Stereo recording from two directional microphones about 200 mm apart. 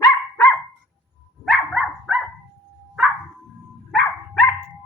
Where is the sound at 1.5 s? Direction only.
Centre (ahead or behind).